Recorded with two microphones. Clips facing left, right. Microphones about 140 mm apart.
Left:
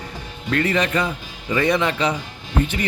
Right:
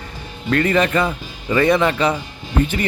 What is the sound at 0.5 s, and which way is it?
Speech, 50° right (ahead or behind).